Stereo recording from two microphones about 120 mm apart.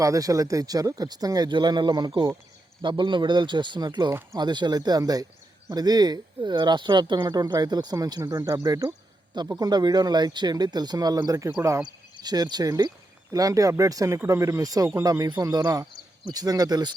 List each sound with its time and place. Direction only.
0.0 s speech: 30° right (ahead or behind)